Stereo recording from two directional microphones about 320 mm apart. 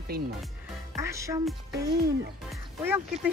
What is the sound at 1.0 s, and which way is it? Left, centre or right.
Speech, centre.